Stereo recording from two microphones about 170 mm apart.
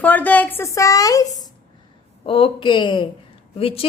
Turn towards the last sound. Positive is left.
turn(degrees=35)  # may be behind; listen again after turning